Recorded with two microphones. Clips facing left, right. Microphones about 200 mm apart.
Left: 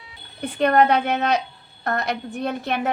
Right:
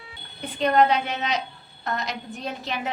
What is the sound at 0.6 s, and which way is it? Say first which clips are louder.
A woman's voice: left 3 dB; 55° left (ahead or behind).